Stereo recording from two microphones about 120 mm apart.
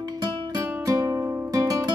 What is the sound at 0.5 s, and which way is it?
Music, 30° right (ahead or behind).